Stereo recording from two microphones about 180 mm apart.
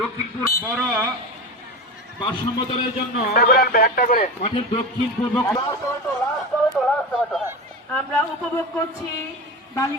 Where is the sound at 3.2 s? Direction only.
55° left (ahead or behind).